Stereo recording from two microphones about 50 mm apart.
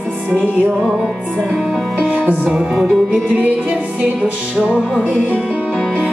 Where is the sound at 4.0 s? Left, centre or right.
Right.